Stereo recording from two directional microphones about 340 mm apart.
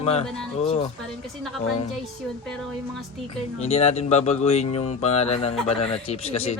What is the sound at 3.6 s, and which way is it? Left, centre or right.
Speech, centre.